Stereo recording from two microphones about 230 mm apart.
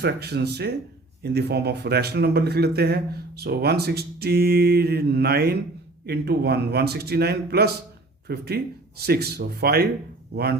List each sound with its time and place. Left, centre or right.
0.0 s speech: right